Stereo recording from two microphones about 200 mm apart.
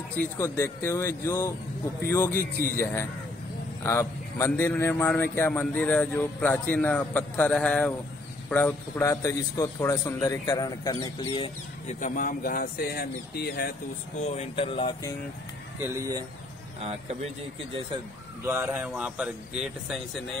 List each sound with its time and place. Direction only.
0.2 s a man's voice: 15° left (ahead or behind)
12.0 s speech: 40° left (ahead or behind)
14.2 s speech: 30° left (ahead or behind)
15.8 s speech: 15° right (ahead or behind)
16.8 s speech: 30° right (ahead or behind)
18.4 s speech: 10° right (ahead or behind)